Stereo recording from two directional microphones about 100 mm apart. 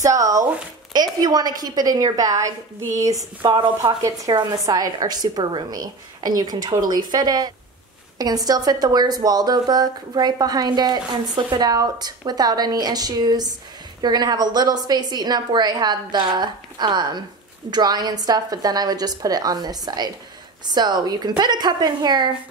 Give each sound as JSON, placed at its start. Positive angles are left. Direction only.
{"t": 0.0, "sound": "a woman's voice", "side_deg": -35}